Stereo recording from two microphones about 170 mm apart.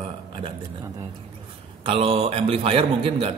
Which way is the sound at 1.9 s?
35° right (ahead or behind).